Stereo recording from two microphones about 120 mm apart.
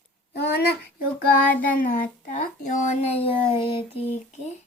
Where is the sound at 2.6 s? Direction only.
90° left; by 4.5 s 55° left (ahead or behind).